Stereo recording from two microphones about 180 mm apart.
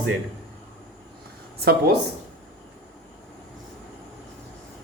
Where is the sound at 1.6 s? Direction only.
60° right (ahead or behind).